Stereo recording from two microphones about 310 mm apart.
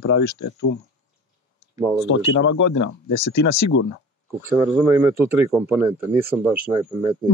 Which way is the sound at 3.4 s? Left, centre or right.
Left.